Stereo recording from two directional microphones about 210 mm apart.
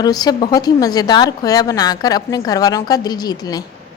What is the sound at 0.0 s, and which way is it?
A woman's voice, 20° left (ahead or behind).